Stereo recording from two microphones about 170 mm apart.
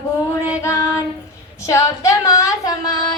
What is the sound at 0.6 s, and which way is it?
Child singing, 15° left (ahead or behind).